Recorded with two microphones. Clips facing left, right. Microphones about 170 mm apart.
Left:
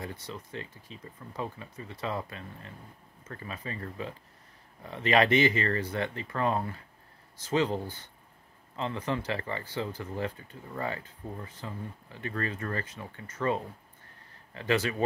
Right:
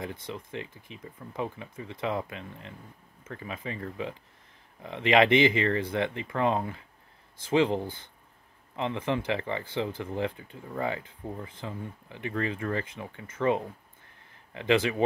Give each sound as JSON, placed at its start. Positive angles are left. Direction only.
{"t": 0.3, "sound": "speech", "side_deg": -20}
{"t": 3.3, "sound": "speech", "side_deg": -15}